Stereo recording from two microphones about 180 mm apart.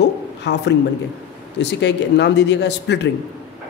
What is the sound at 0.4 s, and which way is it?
Speech, 75° left (ahead or behind).